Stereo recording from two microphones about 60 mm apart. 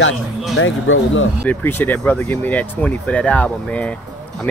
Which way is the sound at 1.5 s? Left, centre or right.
Left.